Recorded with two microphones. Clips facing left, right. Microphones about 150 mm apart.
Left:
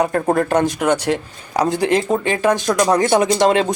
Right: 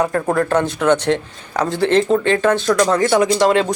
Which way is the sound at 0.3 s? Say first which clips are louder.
Even; 15° left (ahead or behind).